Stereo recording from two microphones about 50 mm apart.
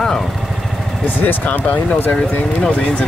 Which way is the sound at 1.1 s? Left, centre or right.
Left.